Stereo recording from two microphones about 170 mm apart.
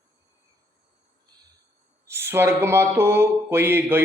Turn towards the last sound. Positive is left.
turn(degrees=-15)  # may be behind; listen again after turning